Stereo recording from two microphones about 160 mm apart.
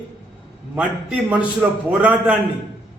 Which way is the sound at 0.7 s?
10° right (ahead or behind).